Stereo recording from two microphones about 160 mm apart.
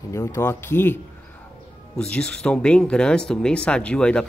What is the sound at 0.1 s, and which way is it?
Speech, 20° left (ahead or behind).